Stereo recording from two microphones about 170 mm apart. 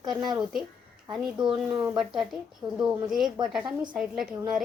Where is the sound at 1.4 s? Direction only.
30° right (ahead or behind).